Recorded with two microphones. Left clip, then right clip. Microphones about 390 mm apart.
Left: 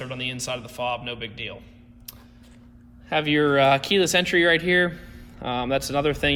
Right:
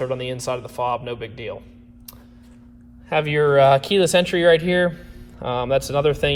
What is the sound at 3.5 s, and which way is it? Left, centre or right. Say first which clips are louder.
Speech: right 6 dB; centre.